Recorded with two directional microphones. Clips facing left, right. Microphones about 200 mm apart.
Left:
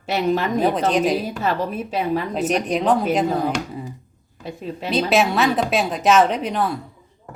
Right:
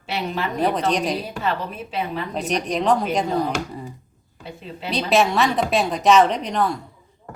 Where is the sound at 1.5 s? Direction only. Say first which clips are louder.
Left 3 dB; 40° left (ahead or behind).